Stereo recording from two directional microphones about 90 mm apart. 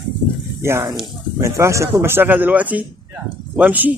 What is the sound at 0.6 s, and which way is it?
Speech, 30° right (ahead or behind).